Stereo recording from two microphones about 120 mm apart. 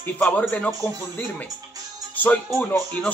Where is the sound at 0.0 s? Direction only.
15° left (ahead or behind).